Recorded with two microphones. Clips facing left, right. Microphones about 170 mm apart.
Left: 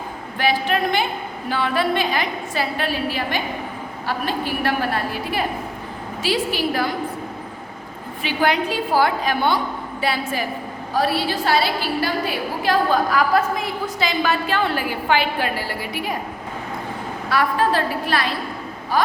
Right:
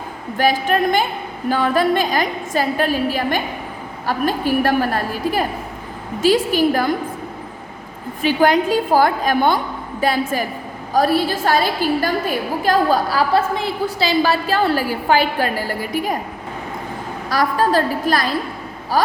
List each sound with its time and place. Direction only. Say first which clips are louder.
0.3 s a woman's voice: right 3 dB; 45° right (ahead or behind)
8.2 s a woman's voice: right 5 dB; 45° right (ahead or behind)
17.2 s a woman's voice: right 2 dB; 40° right (ahead or behind)